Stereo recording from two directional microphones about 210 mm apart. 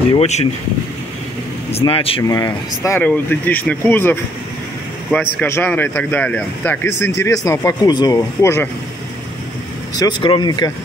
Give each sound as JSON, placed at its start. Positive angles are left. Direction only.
{"t": 0.1, "sound": "speech", "side_deg": 30}
{"t": 1.7, "sound": "speech", "side_deg": 25}
{"t": 9.9, "sound": "speech", "side_deg": 20}